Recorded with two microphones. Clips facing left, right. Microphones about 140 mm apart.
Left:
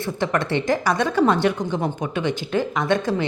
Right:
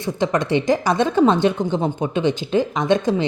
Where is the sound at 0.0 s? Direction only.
15° right (ahead or behind).